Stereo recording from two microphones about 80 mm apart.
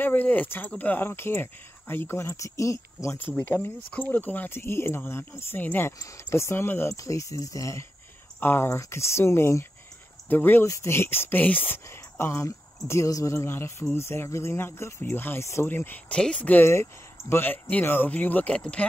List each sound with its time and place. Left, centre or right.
0.0 s speech: left
3.2 s speech: left
5.9 s speech: left
8.4 s speech: left
10.6 s speech: left
16.1 s speech: centre
16.6 s speech: left; by 18.9 s centre